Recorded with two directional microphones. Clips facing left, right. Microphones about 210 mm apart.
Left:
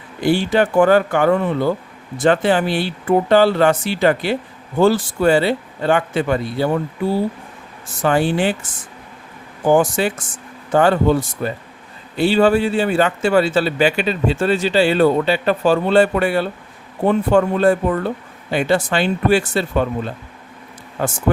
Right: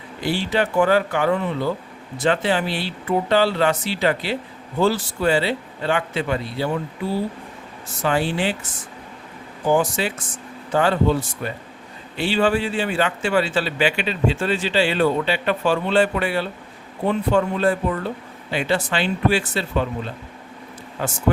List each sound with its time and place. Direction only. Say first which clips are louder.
0.2 s speech: left 6 dB; 50° left (ahead or behind)
8.0 s speech: left 5 dB; 50° left (ahead or behind)
9.6 s speech: left 5 dB; 50° left (ahead or behind)
21.0 s speech: left 5 dB; 45° left (ahead or behind)